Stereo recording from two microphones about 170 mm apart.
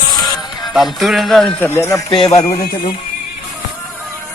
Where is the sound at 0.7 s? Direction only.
Centre (ahead or behind).